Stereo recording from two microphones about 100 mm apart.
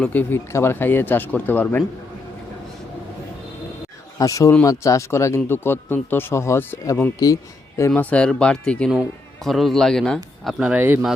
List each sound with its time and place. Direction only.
0.0 s a man's voice: 15° left (ahead or behind)
4.2 s a man's voice: 35° left (ahead or behind); by 10.2 s 5° left (ahead or behind)
10.4 s speech: 10° right (ahead or behind)